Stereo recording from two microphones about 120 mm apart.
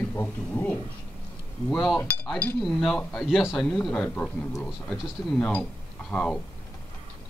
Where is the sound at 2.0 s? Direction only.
10° left (ahead or behind).